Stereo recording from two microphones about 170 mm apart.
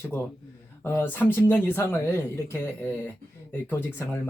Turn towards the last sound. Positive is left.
turn(degrees=10)  # may be behind; listen again after turning